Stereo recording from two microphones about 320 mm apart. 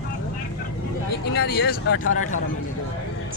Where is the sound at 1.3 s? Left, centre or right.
Left.